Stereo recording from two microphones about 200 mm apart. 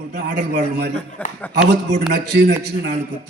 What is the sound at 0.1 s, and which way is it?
Speech, 55° right (ahead or behind).